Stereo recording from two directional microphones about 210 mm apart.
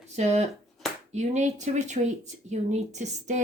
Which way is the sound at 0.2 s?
30° right (ahead or behind).